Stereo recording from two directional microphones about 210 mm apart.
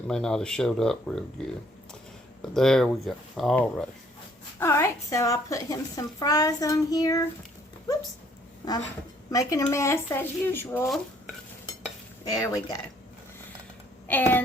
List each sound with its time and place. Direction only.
0.1 s speech: 5° left (ahead or behind)
2.6 s a woman's voice: centre (ahead or behind)
8.6 s a sound: 20° left (ahead or behind)
9.3 s a woman's voice: 15° left (ahead or behind)
12.3 s a woman's voice: 15° left (ahead or behind)
14.1 s a woman's voice: 10° left (ahead or behind)